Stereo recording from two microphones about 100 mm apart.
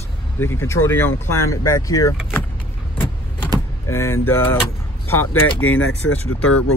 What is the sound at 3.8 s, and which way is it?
Speech, 25° left (ahead or behind).